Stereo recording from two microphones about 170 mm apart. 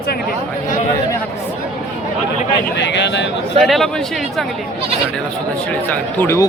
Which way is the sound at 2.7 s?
90° left.